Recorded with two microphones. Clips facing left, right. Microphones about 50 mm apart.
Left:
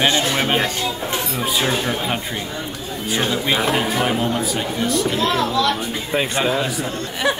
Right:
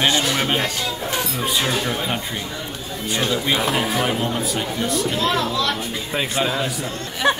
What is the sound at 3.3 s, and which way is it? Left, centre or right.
A child's voice, centre.